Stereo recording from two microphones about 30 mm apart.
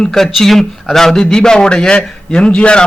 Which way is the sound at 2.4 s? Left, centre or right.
Left.